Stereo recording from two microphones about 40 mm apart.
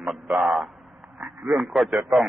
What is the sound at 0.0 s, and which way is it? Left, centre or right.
Speech, centre.